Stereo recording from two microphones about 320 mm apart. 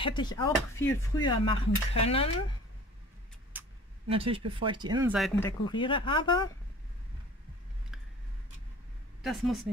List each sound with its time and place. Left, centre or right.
0.0 s speech: centre
3.5 s a sound: centre
4.1 s speech: centre
5.1 s speech: centre
5.7 s speech: centre
9.2 s speech: centre